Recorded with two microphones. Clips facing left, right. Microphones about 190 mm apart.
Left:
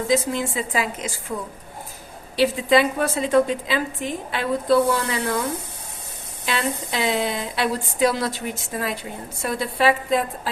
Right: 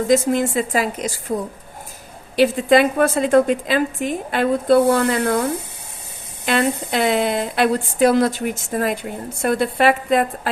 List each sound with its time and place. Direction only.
0.3 s a woman's voice: 45° right (ahead or behind)
2.3 s a woman's voice: 50° right (ahead or behind)